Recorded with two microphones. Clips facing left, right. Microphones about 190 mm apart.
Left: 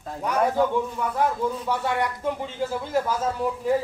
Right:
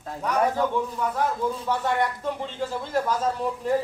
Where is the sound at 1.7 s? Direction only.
10° left (ahead or behind).